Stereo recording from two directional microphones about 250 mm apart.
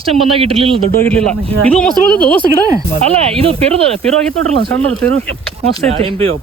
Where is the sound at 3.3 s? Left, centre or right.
Right.